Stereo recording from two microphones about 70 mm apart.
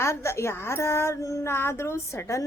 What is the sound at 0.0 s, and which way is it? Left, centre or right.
A woman's voice, left.